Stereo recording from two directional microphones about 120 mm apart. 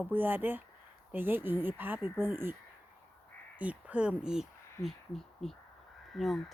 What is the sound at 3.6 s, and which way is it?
Speech, 10° right (ahead or behind).